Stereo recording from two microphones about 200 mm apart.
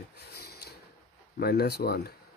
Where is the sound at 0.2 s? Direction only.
55° left (ahead or behind).